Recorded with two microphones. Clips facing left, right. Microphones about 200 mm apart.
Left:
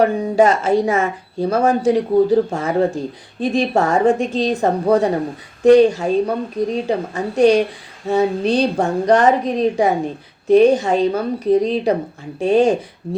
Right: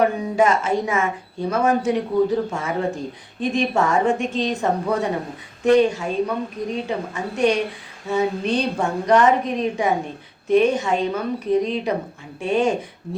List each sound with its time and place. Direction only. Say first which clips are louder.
0.0 s speech: left 4 dB; 35° left (ahead or behind)